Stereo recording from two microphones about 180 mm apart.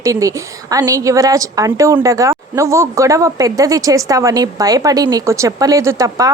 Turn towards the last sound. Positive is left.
turn(degrees=-20)  # may be behind; listen again after turning